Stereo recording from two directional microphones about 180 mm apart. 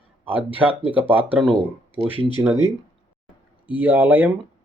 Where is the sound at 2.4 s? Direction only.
15° right (ahead or behind).